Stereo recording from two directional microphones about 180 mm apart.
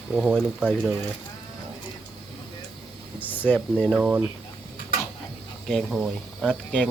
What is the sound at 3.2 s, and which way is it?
Speech, 10° left (ahead or behind).